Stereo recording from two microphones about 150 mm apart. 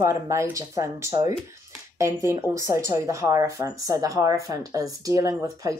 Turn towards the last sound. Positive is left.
turn(degrees=-25)  # may be behind; listen again after turning